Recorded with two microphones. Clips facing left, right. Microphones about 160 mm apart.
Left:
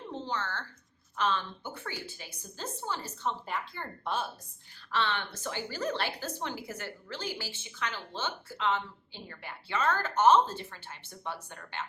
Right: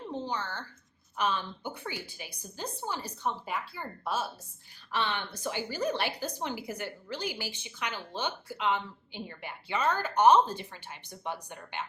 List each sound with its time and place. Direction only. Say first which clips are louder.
0.1 s a woman's voice: even; 15° right (ahead or behind)